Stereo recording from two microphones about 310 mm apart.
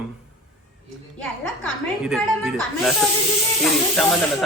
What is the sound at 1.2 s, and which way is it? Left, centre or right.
Speech, centre.